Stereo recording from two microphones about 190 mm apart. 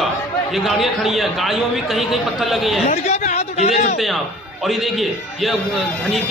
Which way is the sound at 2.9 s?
35° left (ahead or behind).